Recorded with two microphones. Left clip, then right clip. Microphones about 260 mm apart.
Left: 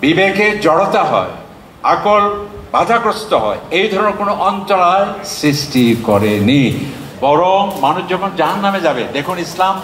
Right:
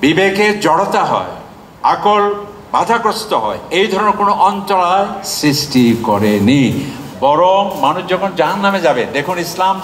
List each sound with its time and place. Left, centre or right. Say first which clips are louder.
0.0 s a man's voice: even; right